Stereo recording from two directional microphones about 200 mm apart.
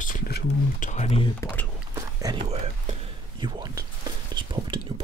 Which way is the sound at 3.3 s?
20° right (ahead or behind).